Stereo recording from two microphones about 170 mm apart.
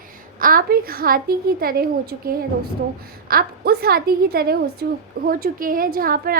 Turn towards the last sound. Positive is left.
turn(degrees=-60)  # may be behind; listen again after turning